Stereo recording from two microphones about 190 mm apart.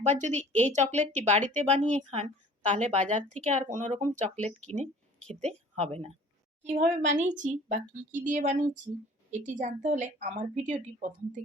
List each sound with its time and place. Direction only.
0.1 s a woman's voice: 40° right (ahead or behind)